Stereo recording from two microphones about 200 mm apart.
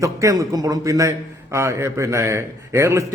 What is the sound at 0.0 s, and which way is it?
A man's voice, 15° right (ahead or behind).